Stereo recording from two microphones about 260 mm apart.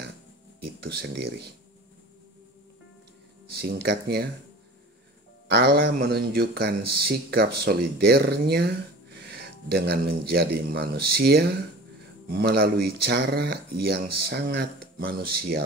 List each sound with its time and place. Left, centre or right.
0.6 s speech: right
3.6 s speech: right
5.5 s speech: right